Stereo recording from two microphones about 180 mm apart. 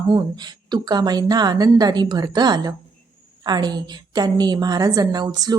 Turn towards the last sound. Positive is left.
turn(degrees=-20)  # may be behind; listen again after turning